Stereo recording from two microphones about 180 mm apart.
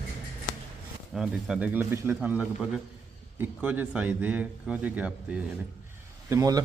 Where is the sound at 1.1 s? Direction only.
Centre (ahead or behind).